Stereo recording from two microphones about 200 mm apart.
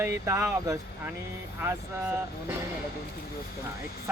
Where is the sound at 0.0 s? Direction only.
15° right (ahead or behind).